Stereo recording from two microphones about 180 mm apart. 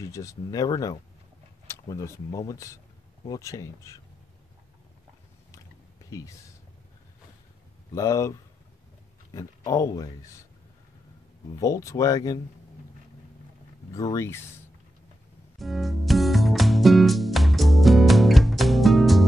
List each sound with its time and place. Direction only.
0.0 s speech: 15° left (ahead or behind)
6.0 s speech: 20° left (ahead or behind)
7.9 s speech: 15° left (ahead or behind)
9.3 s speech: 20° left (ahead or behind)
11.5 s speech: 20° left (ahead or behind)
13.9 s speech: 20° left (ahead or behind)
15.6 s music: centre (ahead or behind)